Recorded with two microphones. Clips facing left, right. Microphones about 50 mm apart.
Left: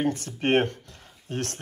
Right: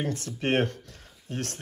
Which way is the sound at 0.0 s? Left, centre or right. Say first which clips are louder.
Left 4 dB; left.